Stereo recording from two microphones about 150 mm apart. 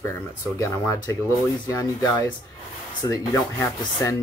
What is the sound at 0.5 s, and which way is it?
Speech, 20° left (ahead or behind).